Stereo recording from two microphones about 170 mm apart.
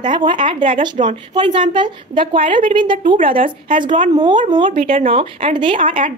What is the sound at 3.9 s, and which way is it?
Speech, 50° right (ahead or behind).